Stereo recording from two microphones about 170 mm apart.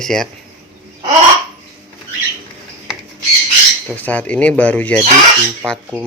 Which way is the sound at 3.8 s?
10° left (ahead or behind).